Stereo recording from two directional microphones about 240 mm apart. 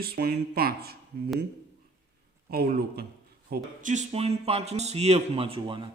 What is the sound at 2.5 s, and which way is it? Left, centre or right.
A man's voice, right.